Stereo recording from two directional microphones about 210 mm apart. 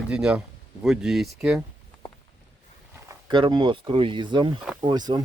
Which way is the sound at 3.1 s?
20° right (ahead or behind).